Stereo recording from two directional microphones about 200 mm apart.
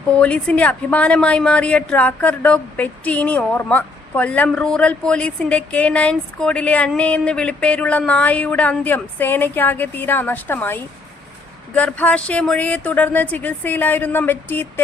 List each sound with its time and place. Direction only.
0.2 s a woman's voice: 5° left (ahead or behind)